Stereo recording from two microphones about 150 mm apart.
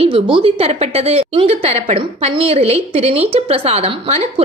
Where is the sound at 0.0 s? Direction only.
35° right (ahead or behind).